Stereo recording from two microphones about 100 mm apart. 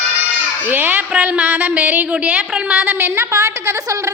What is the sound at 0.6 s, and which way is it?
A woman's voice, 20° right (ahead or behind).